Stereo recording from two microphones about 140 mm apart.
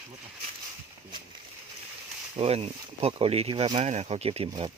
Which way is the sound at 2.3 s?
45° right (ahead or behind).